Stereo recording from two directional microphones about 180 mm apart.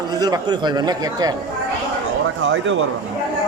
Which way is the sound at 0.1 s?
20° right (ahead or behind).